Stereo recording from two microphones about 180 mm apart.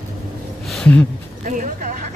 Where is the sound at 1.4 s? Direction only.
45° right (ahead or behind).